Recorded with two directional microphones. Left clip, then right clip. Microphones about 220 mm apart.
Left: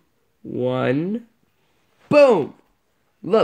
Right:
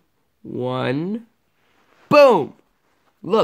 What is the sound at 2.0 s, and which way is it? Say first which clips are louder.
Speech: right 2 dB; 20° right (ahead or behind).